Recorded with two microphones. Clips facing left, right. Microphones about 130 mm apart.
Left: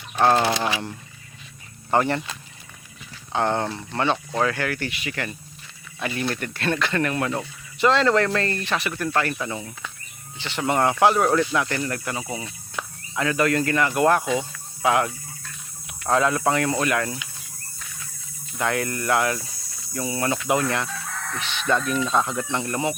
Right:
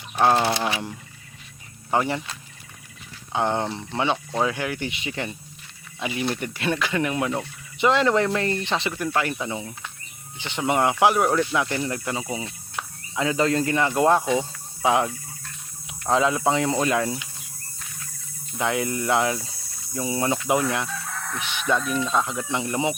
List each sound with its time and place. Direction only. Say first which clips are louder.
0.2 s speech: left 1 dB; 10° right (ahead or behind)
1.9 s speech: left 2 dB; 5° right (ahead or behind)
3.3 s speech: left 1 dB; 15° right (ahead or behind)
18.5 s speech: even; 20° right (ahead or behind)
20.8 s chicken: even; 10° right (ahead or behind)
22.1 s speech: left 1 dB; centre (ahead or behind); by 23.0 s 15° right (ahead or behind)